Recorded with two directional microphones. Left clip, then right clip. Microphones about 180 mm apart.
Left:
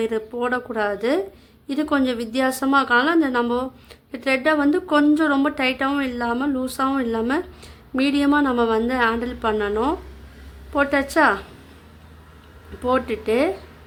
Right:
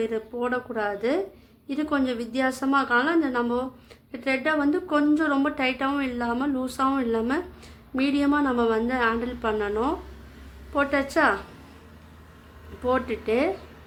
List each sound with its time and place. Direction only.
0.0 s a woman's voice: 25° left (ahead or behind)
12.8 s a woman's voice: 20° left (ahead or behind)